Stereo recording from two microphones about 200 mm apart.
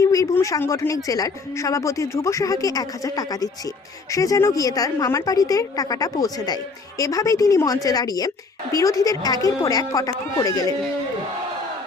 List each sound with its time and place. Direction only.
0.0 s a woman's voice: 15° left (ahead or behind)